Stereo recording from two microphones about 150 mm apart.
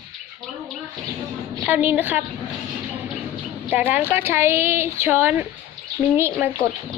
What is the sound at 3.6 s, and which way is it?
A woman's voice, 10° right (ahead or behind).